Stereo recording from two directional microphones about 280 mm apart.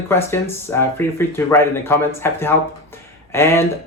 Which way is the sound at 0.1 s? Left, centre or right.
Centre.